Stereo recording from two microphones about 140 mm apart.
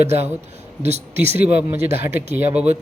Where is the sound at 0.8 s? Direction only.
50° right (ahead or behind).